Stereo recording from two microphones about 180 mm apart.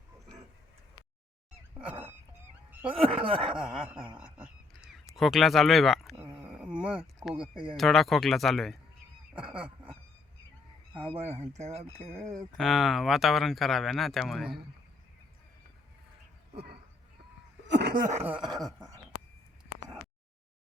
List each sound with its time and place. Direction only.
1.8 s dog: 10° right (ahead or behind)
2.9 s speech: 30° right (ahead or behind)
3.6 s speech: 5° right (ahead or behind)
4.2 s a sound: 5° right (ahead or behind)
5.1 s speech: centre (ahead or behind)
6.3 s a sound: 5° right (ahead or behind)
7.3 s speech: 5° right (ahead or behind)
11.1 s speech: 35° right (ahead or behind)
12.5 s speech: centre (ahead or behind)
17.7 s a sound: 65° right (ahead or behind)